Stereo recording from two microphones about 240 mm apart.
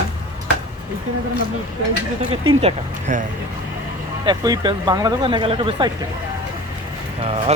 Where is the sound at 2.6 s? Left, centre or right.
Right.